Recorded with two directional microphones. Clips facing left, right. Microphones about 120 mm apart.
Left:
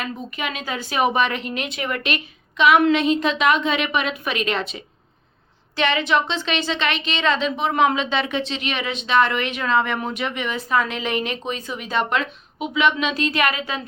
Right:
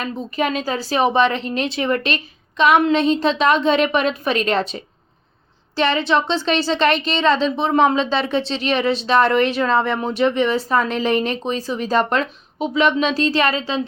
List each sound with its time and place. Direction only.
0.0 s speech: 35° right (ahead or behind)